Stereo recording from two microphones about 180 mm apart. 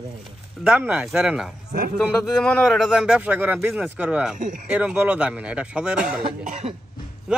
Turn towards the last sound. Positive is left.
turn(degrees=-40)  # may be behind; listen again after turning